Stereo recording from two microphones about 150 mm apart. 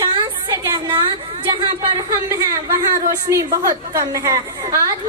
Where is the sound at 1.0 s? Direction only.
30° right (ahead or behind).